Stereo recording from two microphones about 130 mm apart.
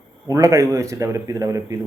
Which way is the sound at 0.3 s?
25° right (ahead or behind).